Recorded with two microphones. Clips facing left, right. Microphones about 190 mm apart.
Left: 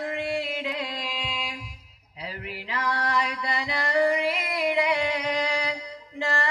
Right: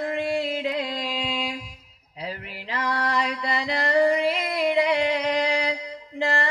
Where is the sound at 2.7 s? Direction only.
35° right (ahead or behind).